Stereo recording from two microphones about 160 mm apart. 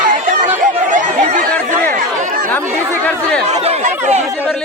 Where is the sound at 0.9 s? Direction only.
50° right (ahead or behind).